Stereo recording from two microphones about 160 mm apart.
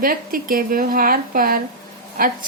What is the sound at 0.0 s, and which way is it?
Speech, 60° right (ahead or behind).